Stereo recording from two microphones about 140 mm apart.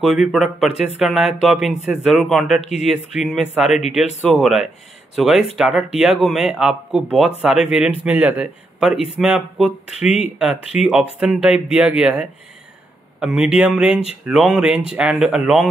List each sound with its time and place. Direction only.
0.0 s speech: centre (ahead or behind)